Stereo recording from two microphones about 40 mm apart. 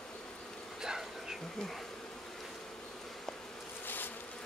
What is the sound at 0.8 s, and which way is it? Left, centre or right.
Insect, centre.